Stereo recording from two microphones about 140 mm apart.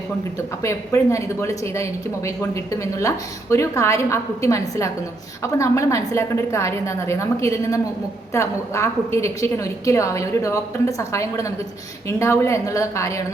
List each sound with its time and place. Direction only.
0.6 s a woman's voice: 20° left (ahead or behind)